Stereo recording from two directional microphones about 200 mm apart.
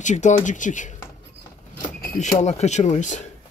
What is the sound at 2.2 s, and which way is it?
Speech, 35° left (ahead or behind).